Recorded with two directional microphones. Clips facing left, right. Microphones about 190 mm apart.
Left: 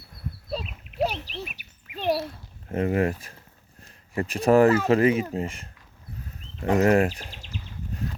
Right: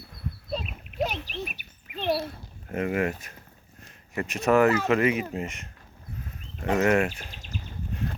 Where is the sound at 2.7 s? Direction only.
35° left (ahead or behind).